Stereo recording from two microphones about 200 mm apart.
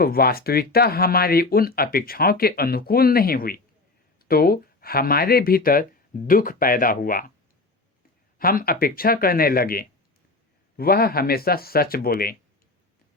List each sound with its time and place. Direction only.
0.0 s speech: 50° left (ahead or behind)
8.4 s speech: 45° left (ahead or behind)